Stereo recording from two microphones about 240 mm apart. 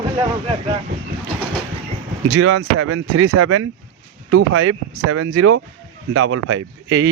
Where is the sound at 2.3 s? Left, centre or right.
Right.